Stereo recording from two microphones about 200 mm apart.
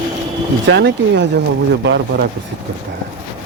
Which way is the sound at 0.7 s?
60° right (ahead or behind).